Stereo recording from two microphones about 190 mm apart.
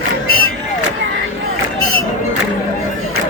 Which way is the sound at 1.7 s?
90° right.